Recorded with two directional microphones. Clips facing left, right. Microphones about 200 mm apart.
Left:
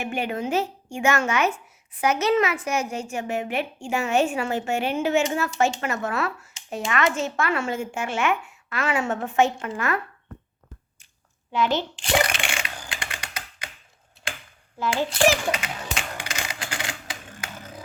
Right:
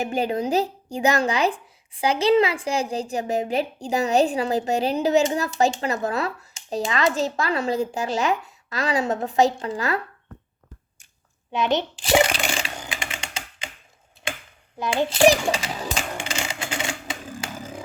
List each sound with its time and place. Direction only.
0.0 s speech: 35° right (ahead or behind)
11.5 s a child's voice: 20° right (ahead or behind)
12.4 s typing: 35° right (ahead or behind)
14.8 s a child's voice: 20° right (ahead or behind)
15.3 s typewriter: 35° right (ahead or behind)